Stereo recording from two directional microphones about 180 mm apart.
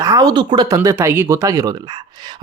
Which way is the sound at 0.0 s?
20° right (ahead or behind).